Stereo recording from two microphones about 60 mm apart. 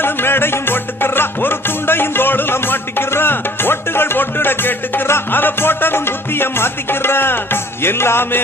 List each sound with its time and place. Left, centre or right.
0.0 s music: left